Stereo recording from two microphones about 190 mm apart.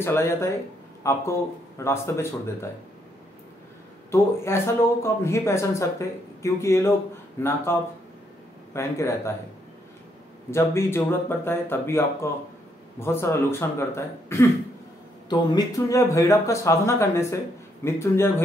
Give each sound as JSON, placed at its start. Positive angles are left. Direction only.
{"t": 0.0, "sound": "speech", "side_deg": 15}
{"t": 4.1, "sound": "speech", "side_deg": 15}
{"t": 8.7, "sound": "speech", "side_deg": 15}
{"t": 10.5, "sound": "speech", "side_deg": 15}